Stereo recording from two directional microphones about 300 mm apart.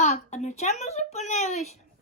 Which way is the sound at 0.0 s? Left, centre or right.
Left.